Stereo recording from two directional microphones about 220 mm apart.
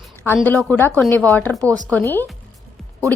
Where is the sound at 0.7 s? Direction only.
10° left (ahead or behind).